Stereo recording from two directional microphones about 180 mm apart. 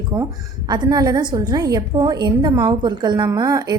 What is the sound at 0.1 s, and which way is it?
A woman's voice, 20° right (ahead or behind).